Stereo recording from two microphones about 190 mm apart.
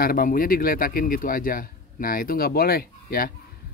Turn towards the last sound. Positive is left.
turn(degrees=50)  # may be behind; listen again after turning